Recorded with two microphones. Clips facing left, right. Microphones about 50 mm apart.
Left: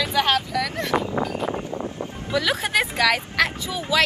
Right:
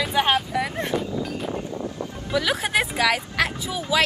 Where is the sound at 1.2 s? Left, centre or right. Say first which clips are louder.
Left 4 dB; centre.